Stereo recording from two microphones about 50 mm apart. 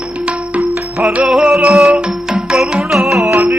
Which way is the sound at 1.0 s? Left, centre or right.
Right.